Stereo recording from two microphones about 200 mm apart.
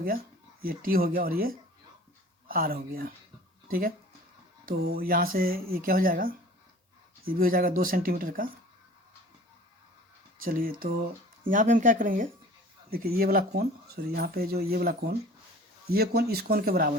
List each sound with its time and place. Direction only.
0.0 s speech: 45° right (ahead or behind)
10.4 s speech: 45° right (ahead or behind)